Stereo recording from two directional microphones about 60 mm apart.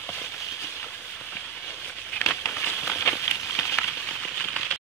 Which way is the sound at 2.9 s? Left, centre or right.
Left.